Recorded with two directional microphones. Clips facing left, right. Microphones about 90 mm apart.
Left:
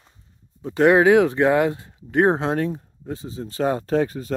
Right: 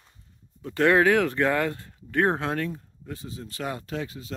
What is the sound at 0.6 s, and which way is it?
Speech, 20° left (ahead or behind).